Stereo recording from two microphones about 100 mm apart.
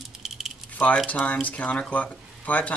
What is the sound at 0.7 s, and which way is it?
Keys jangling, 15° left (ahead or behind).